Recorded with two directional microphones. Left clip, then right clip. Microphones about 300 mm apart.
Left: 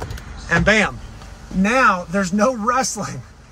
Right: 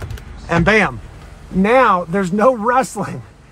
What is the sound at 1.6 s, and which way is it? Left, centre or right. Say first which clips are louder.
A man's voice: right 4 dB; centre.